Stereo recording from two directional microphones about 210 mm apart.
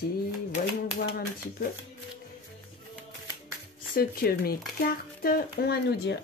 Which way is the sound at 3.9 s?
45° left (ahead or behind).